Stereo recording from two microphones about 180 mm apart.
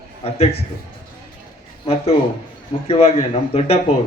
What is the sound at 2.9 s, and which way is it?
Speech, 35° left (ahead or behind).